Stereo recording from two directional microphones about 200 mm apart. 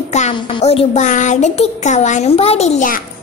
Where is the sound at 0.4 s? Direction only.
25° left (ahead or behind).